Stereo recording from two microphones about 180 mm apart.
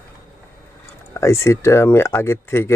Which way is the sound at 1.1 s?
15° left (ahead or behind).